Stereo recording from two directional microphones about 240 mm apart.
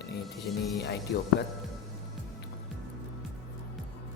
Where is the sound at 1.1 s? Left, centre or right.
Left.